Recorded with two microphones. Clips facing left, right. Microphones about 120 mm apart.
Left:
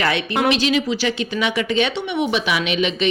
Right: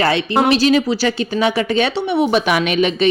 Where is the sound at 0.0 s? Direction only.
35° right (ahead or behind).